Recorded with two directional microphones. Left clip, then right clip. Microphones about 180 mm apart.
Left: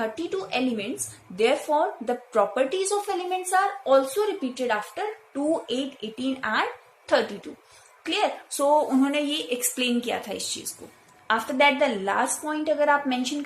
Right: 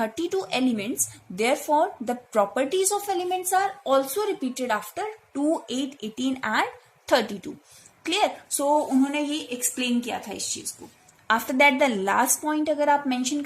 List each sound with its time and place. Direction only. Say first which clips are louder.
0.0 s a woman's voice: right 2 dB; 45° right (ahead or behind)
9.0 s a woman's voice: left 1 dB; 15° right (ahead or behind)
11.3 s a woman's voice: right 1 dB; 45° right (ahead or behind)